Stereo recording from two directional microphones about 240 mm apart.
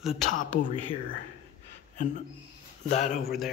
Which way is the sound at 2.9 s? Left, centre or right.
Left.